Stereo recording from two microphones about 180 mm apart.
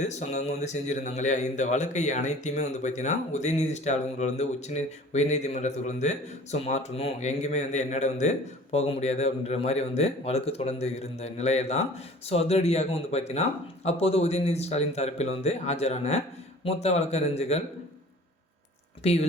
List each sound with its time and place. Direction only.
0.0 s a man's voice: 40° left (ahead or behind)